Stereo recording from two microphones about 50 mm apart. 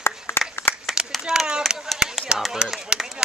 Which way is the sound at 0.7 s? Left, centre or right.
Left.